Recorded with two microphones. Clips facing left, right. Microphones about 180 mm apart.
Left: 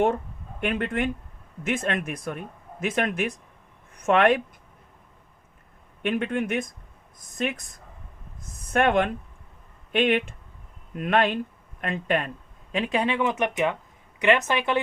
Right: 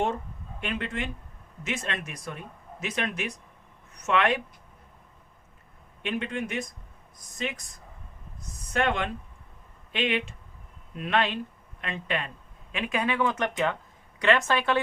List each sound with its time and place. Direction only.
0.6 s speech: 55° left (ahead or behind)
6.0 s speech: 50° left (ahead or behind)
8.7 s speech: 55° left (ahead or behind)
12.7 s speech: 30° left (ahead or behind)